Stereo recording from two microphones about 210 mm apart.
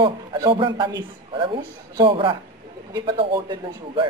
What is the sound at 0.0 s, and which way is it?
Speech, 25° right (ahead or behind).